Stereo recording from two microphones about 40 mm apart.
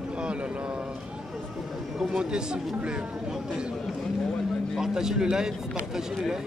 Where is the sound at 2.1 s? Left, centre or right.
Right.